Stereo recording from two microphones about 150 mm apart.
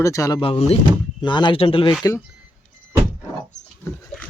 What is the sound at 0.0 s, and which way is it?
Speech, 20° left (ahead or behind).